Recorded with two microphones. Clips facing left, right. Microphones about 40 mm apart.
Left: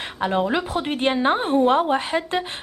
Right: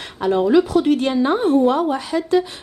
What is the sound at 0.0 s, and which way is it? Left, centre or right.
A woman's voice, left.